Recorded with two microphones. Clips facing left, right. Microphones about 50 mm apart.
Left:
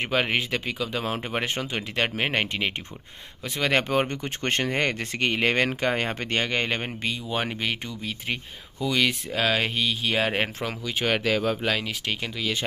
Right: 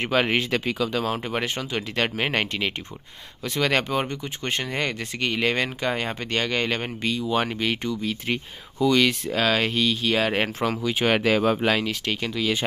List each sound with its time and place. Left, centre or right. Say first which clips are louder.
0.1 s speech: right 3 dB; centre
0.8 s speech: right 4 dB; centre
1.4 s speech: right 1 dB; left
1.8 s speech: right 2 dB; centre
3.9 s speech: left 1 dB; left; by 10.4 s centre
10.4 s speech: right 4 dB; centre
10.9 s speech: right 2 dB; centre
11.1 s speech: right 4 dB; right
11.8 s speech: right 3 dB; centre